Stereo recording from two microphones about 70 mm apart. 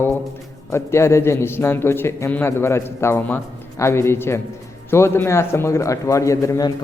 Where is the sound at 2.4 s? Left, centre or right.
Left.